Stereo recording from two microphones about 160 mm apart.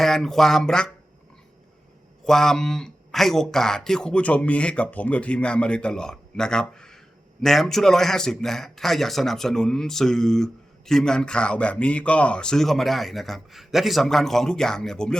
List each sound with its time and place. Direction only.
0.0 s speech: centre (ahead or behind)
2.2 s speech: 5° left (ahead or behind)